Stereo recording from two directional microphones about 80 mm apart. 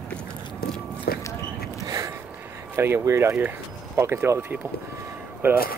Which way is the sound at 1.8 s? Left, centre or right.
Right.